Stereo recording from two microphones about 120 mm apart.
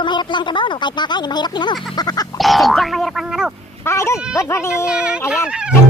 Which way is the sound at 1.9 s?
35° left (ahead or behind).